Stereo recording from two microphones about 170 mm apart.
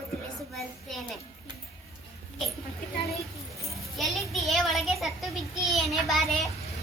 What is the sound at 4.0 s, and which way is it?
A child's voice, centre (ahead or behind).